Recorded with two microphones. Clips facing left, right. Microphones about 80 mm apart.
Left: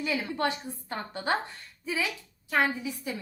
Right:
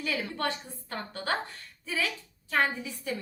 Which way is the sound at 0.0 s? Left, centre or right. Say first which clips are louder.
Left 3 dB; centre.